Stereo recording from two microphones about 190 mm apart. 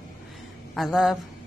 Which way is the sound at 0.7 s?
Centre (ahead or behind).